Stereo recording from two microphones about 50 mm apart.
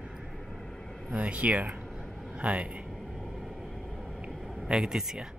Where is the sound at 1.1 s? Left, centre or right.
Right.